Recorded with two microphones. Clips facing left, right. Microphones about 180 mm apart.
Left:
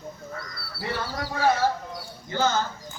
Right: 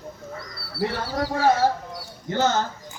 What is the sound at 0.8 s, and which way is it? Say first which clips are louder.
Speech: right 5 dB; 40° right (ahead or behind).